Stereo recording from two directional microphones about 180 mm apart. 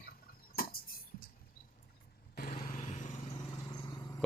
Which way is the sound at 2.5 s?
40° left (ahead or behind).